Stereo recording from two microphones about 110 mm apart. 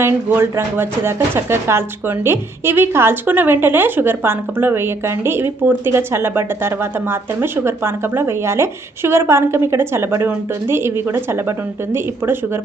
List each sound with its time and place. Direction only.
0.0 s speech: 20° right (ahead or behind)